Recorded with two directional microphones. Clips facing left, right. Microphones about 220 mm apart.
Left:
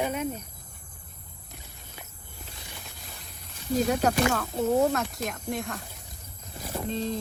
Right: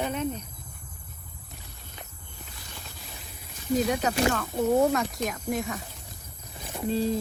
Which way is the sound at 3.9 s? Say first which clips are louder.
Left 1 dB; 5° left (ahead or behind).